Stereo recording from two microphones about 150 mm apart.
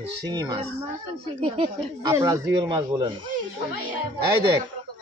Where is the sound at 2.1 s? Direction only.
20° right (ahead or behind).